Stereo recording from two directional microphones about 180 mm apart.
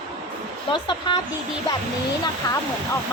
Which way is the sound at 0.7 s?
25° left (ahead or behind).